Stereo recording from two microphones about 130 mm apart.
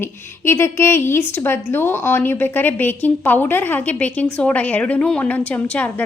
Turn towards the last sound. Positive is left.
turn(degrees=10)  # may be behind; listen again after turning